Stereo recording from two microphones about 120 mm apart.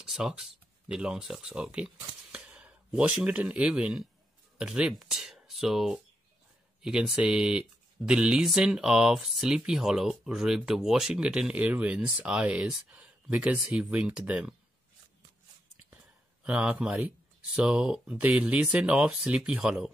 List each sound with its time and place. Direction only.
0.0 s speech: 5° right (ahead or behind)
16.4 s speech: 10° right (ahead or behind)